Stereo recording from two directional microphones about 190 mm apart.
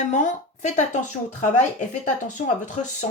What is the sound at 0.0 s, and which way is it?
Speech, 40° left (ahead or behind).